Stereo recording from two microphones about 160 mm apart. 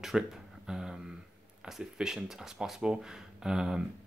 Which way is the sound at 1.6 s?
5° right (ahead or behind).